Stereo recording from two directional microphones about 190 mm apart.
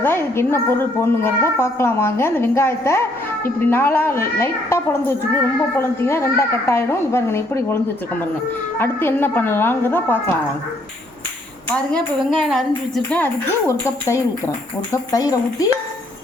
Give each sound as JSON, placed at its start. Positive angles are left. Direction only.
{"t": 0.0, "sound": "a woman's voice", "side_deg": 10}
{"t": 8.8, "sound": "a woman's voice", "side_deg": 10}
{"t": 11.7, "sound": "a woman's voice", "side_deg": 5}